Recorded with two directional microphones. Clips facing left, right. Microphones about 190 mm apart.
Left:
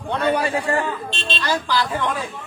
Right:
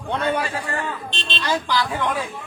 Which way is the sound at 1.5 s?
10° right (ahead or behind).